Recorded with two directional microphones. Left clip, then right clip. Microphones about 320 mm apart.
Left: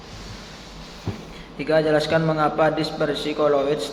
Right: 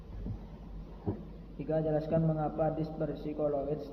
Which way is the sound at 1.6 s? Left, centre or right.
Centre.